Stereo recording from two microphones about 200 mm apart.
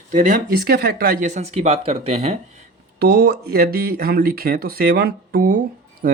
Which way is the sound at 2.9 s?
55° right (ahead or behind).